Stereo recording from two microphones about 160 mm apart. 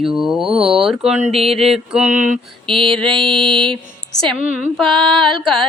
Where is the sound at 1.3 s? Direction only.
40° right (ahead or behind).